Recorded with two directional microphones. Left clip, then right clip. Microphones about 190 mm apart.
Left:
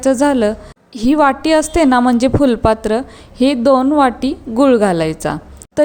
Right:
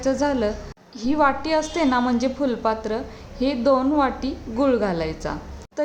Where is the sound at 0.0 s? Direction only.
40° left (ahead or behind).